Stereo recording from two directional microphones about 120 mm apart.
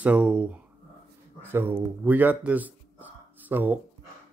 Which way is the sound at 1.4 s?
20° right (ahead or behind).